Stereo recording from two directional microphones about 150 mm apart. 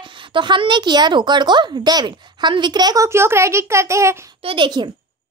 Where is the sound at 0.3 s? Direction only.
35° right (ahead or behind).